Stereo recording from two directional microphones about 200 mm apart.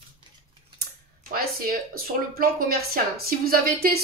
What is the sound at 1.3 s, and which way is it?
Speech, 45° right (ahead or behind).